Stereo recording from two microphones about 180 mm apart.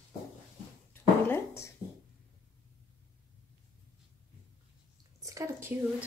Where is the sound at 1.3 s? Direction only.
15° left (ahead or behind).